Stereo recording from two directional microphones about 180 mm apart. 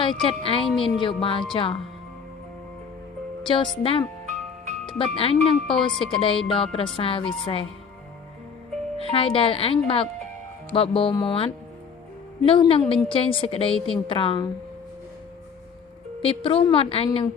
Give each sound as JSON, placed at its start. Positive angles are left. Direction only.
{"t": 0.0, "sound": "speech", "side_deg": 30}
{"t": 3.4, "sound": "speech", "side_deg": 30}
{"t": 9.0, "sound": "speech", "side_deg": 30}
{"t": 13.7, "sound": "a woman's voice", "side_deg": 5}
{"t": 14.1, "sound": "speech", "side_deg": 30}
{"t": 16.2, "sound": "speech", "side_deg": 30}